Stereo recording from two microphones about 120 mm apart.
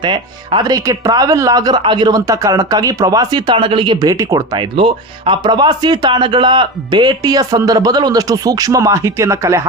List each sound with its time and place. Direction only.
0.0 s speech: 40° right (ahead or behind)
4.0 s speech: 30° right (ahead or behind)
4.5 s speech: 45° right (ahead or behind); by 9.6 s 25° right (ahead or behind)